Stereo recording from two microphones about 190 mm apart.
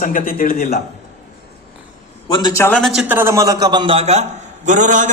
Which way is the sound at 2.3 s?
20° left (ahead or behind).